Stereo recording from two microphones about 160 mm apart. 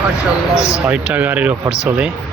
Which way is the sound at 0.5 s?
20° left (ahead or behind).